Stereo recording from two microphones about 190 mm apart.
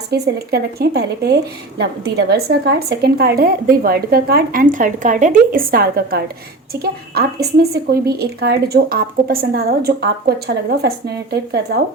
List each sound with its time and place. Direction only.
0.1 s a woman's voice: 55° right (ahead or behind)